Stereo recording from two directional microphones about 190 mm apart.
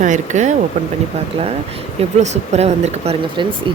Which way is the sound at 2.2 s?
35° right (ahead or behind).